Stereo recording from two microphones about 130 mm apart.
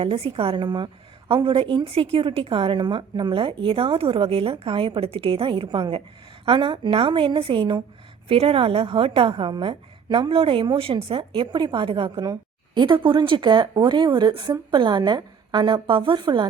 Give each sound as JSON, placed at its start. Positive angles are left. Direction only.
{"t": 0.0, "sound": "a woman's voice", "side_deg": -45}